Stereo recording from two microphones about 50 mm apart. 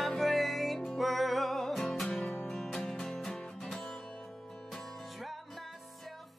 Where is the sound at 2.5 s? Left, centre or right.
Centre.